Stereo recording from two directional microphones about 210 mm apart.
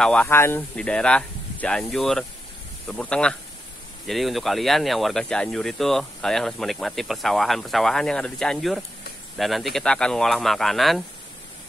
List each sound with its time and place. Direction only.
0.0 s speech: 5° left (ahead or behind)